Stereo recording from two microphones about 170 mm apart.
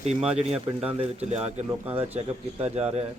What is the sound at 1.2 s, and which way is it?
Speech, 40° right (ahead or behind).